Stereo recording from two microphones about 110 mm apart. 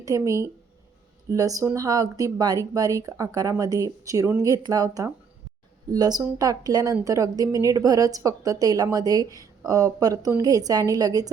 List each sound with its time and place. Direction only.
0.0 s a woman's voice: 30° right (ahead or behind)